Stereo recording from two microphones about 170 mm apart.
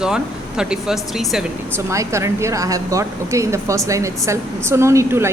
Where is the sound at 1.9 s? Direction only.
15° right (ahead or behind).